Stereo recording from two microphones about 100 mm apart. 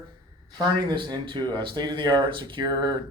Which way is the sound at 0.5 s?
45° right (ahead or behind).